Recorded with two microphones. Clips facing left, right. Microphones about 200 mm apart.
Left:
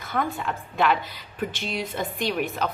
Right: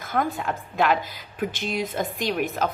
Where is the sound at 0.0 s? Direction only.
45° right (ahead or behind).